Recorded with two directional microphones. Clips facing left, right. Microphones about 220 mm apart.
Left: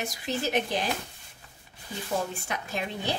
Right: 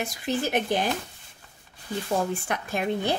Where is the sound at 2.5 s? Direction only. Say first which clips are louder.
Right 6 dB; 55° right (ahead or behind).